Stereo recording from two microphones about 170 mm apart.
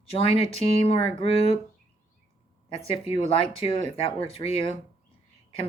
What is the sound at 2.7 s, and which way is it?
Speech, 35° left (ahead or behind).